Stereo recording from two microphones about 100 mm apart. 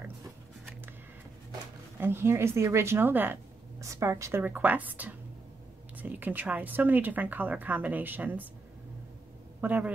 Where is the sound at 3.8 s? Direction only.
35° right (ahead or behind).